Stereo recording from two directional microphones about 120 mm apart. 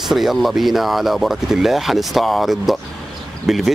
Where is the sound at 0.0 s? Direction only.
Centre (ahead or behind).